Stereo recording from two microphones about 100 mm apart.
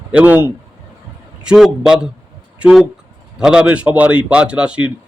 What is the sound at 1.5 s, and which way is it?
A man's voice, 5° right (ahead or behind).